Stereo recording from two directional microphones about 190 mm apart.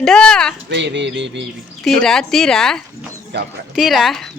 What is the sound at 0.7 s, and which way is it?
Speech, 70° right (ahead or behind).